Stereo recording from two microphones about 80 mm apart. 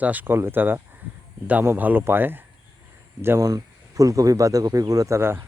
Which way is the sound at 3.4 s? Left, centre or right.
Right.